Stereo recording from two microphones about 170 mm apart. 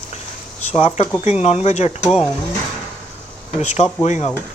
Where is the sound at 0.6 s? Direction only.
40° left (ahead or behind).